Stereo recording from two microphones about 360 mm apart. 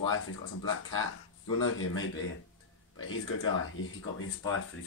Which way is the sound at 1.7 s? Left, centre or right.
Left.